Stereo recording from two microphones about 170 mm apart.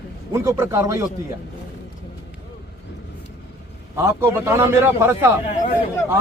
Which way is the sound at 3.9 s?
15° right (ahead or behind).